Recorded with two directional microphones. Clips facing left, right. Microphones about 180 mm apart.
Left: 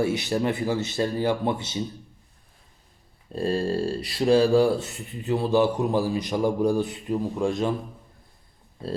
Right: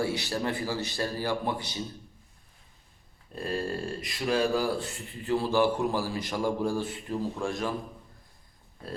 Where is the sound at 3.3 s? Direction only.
30° left (ahead or behind).